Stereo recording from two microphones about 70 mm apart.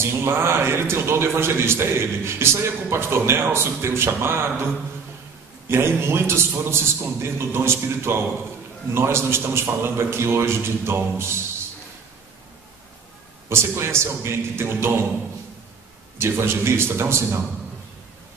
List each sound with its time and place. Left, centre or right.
0.0 s a man's voice: right
5.7 s a man's voice: right
13.5 s a man's voice: right
16.2 s a man's voice: right